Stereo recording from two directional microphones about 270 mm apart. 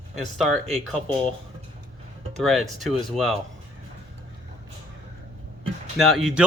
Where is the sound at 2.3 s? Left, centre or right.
Centre.